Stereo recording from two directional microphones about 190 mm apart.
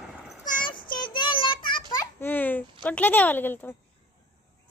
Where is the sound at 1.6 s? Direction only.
25° left (ahead or behind).